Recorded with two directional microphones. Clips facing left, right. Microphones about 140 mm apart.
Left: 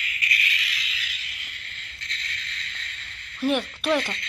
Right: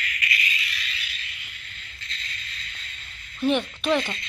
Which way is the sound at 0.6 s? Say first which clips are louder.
Even; 90° left.